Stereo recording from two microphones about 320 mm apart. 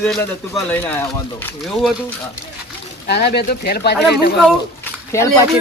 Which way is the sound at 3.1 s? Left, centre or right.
Left.